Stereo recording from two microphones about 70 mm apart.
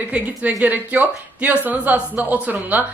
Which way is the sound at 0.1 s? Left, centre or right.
Centre.